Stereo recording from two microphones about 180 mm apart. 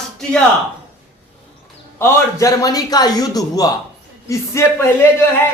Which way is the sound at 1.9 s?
15° left (ahead or behind).